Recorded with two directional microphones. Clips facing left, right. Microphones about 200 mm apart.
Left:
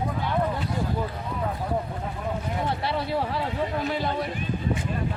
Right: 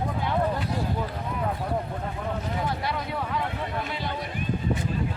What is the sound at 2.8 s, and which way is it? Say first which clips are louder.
Speech: left 3 dB; 30° left (ahead or behind).